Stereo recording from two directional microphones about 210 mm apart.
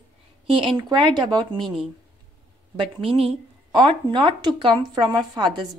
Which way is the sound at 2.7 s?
25° right (ahead or behind).